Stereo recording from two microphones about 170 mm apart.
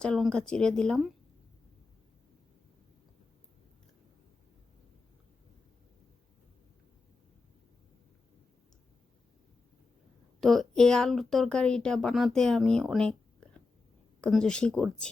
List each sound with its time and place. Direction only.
0.0 s speech: 5° left (ahead or behind)
10.4 s speech: centre (ahead or behind)